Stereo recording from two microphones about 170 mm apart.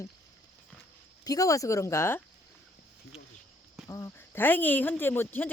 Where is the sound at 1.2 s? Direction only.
20° left (ahead or behind).